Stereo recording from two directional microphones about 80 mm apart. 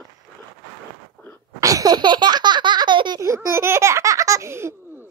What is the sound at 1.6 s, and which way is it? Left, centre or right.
Baby laughter, right.